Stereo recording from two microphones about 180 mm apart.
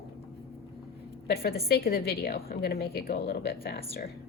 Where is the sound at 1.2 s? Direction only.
60° left (ahead or behind).